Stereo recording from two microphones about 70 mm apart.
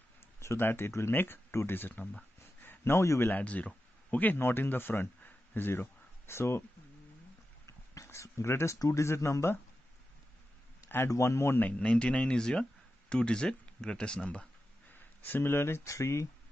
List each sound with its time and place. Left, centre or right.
0.4 s speech: left
3.3 s speech: left
7.6 s a sound: left
8.7 s speech: left
11.1 s speech: left
11.6 s speech: centre
15.2 s speech: left
15.8 s speech: left